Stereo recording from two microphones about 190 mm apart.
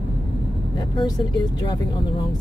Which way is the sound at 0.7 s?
20° left (ahead or behind).